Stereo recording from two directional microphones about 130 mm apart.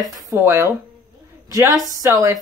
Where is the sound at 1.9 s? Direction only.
25° right (ahead or behind).